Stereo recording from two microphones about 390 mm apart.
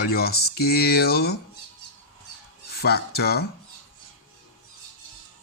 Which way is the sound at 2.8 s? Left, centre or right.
Left.